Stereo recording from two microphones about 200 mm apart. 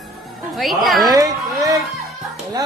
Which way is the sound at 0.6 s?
Centre (ahead or behind).